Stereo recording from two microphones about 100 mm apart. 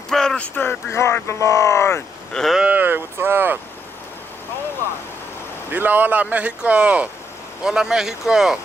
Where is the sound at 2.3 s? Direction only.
5° left (ahead or behind).